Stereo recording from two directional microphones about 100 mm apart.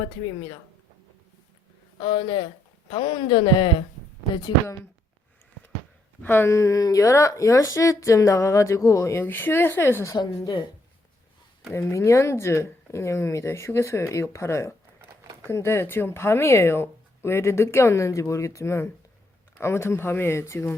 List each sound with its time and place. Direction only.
2.0 s speech: 55° left (ahead or behind)
6.2 s a woman's voice: 20° left (ahead or behind)
10.2 s speech: 45° left (ahead or behind)
11.7 s speech: 30° left (ahead or behind)